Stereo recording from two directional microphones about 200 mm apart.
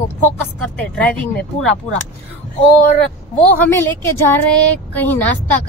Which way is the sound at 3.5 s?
10° left (ahead or behind).